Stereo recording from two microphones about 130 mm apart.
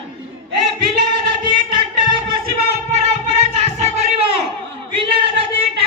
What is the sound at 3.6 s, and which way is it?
Crowd, 60° right (ahead or behind).